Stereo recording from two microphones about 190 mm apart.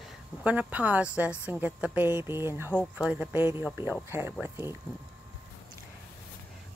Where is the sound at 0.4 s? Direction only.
5° right (ahead or behind).